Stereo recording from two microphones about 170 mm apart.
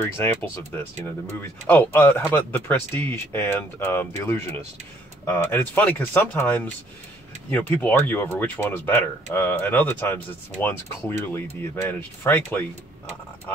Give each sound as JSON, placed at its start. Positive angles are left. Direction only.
{"t": 0.0, "sound": "speech", "side_deg": 15}